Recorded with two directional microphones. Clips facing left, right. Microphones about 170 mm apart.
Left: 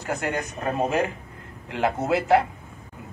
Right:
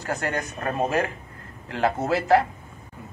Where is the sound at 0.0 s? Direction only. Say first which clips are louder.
Even; 15° left (ahead or behind).